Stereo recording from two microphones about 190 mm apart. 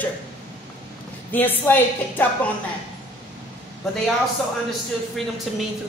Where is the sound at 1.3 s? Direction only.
10° left (ahead or behind).